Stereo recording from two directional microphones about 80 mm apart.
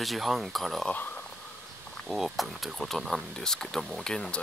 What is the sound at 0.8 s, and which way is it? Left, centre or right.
Speech, centre.